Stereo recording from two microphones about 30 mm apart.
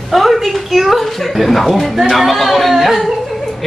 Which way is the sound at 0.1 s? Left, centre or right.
Centre.